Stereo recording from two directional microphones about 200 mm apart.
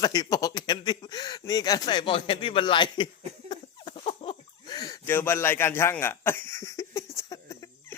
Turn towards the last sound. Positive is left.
turn(degrees=15)  # may be behind; listen again after turning